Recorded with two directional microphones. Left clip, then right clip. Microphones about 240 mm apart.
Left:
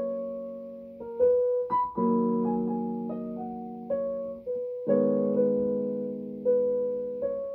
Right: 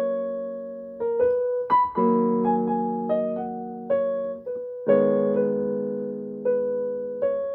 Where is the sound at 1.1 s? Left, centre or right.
Right.